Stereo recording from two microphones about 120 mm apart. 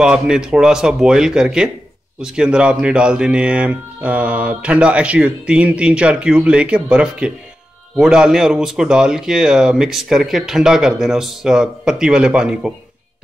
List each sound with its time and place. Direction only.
0.0 s speech: 5° right (ahead or behind)